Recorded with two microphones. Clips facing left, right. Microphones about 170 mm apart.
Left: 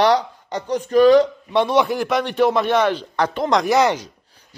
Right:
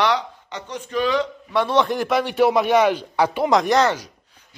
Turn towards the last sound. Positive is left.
turn(degrees=15)  # may be behind; listen again after turning